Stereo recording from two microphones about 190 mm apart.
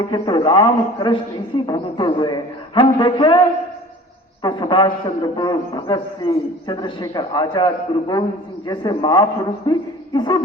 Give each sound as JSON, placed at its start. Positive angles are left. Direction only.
{"t": 0.1, "sound": "a man's voice", "side_deg": 25}
{"t": 4.4, "sound": "a man's voice", "side_deg": 25}